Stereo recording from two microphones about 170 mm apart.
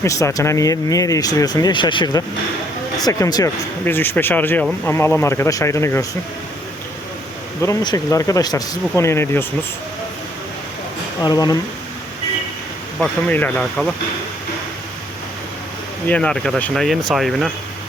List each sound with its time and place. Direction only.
0.0 s speech: 15° left (ahead or behind)
7.6 s speech: 20° left (ahead or behind)
11.2 s speech: 25° left (ahead or behind)
13.0 s speech: 10° left (ahead or behind)
16.0 s speech: 5° left (ahead or behind)